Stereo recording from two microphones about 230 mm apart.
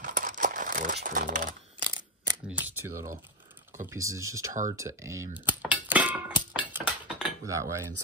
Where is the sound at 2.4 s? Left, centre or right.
Centre.